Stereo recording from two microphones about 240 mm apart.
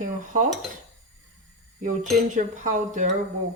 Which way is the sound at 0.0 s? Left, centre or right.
Right.